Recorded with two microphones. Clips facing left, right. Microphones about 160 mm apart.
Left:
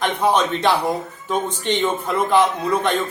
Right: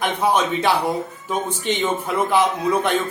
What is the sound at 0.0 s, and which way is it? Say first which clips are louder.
A man's voice: left 1 dB; 10° right (ahead or behind).